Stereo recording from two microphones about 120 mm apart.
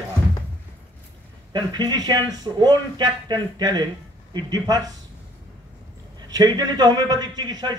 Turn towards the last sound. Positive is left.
turn(degrees=-35)  # may be behind; listen again after turning